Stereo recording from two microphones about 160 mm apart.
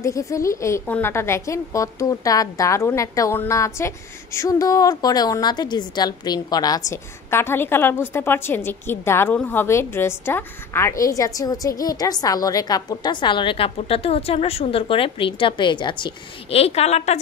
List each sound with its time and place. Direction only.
0.0 s a woman's voice: 20° left (ahead or behind); by 17.2 s 40° left (ahead or behind)